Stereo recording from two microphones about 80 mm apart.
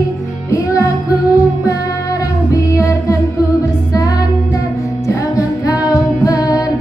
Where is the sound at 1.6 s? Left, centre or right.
Left.